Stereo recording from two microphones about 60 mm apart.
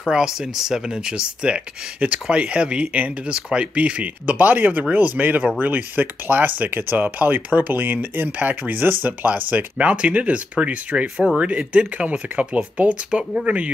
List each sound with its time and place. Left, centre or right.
0.0 s speech: centre